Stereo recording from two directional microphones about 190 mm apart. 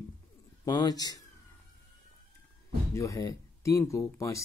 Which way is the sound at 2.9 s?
15° left (ahead or behind).